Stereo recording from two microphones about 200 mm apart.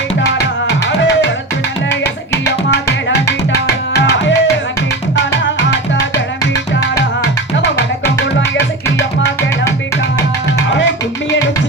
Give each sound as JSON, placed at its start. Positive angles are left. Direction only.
{"t": 4.2, "sound": "music", "side_deg": 65}
{"t": 6.5, "sound": "music", "side_deg": 15}